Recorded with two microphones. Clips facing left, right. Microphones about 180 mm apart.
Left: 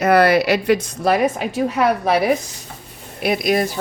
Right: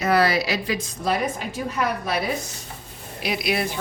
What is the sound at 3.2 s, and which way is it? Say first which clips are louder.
Speech: left 7 dB; 50° left (ahead or behind).